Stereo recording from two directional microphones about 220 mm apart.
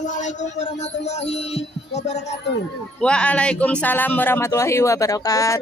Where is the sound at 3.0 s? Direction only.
5° left (ahead or behind).